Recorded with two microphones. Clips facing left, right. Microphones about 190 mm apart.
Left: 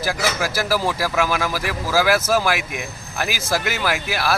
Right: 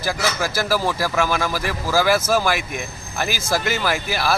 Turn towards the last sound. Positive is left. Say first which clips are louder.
# even
turn(degrees=5)  # may be behind; listen again after turning